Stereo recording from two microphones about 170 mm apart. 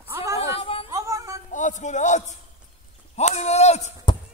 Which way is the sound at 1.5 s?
45° left (ahead or behind).